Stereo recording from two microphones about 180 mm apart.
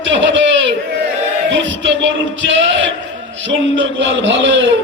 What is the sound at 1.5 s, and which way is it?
Music, 90° right.